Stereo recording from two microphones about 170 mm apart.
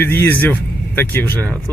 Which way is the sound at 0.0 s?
10° left (ahead or behind).